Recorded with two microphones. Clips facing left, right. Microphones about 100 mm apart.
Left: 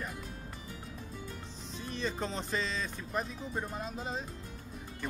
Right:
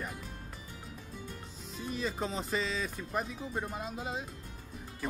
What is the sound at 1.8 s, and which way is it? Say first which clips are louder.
Speech: right 1 dB; 5° right (ahead or behind).